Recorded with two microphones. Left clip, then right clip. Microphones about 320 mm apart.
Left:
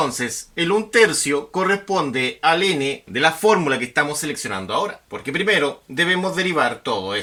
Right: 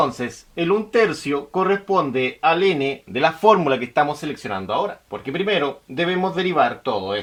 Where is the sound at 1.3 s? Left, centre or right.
Centre.